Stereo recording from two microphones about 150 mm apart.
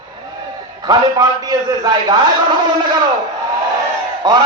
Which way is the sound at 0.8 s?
25° right (ahead or behind).